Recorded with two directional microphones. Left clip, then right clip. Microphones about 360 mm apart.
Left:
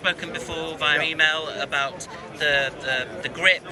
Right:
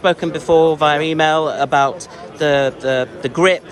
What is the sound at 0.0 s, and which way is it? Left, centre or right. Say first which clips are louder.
A man's voice: right 9 dB; centre.